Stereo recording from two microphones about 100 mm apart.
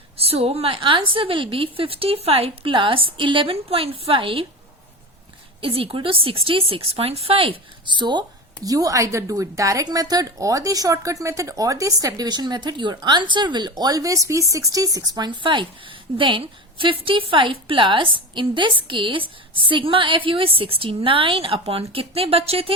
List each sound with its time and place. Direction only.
0.2 s a woman's voice: 80° right; by 4.4 s 60° right (ahead or behind)
5.5 s a woman's voice: 65° right (ahead or behind); by 8.2 s 50° right (ahead or behind)
8.6 s a woman's voice: 35° right (ahead or behind); by 22.7 s 75° right (ahead or behind)